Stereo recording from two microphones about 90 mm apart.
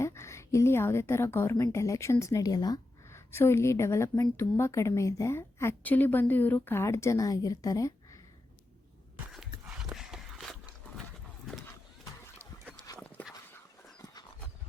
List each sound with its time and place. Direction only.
0.0 s a woman's voice: 30° left (ahead or behind); by 2.8 s 45° left (ahead or behind)
3.1 s a woman's voice: 30° left (ahead or behind)
5.8 s a woman's voice: 20° left (ahead or behind); by 8.2 s 40° left (ahead or behind)
9.9 s horse: 5° right (ahead or behind)
12.9 s dog: 40° left (ahead or behind)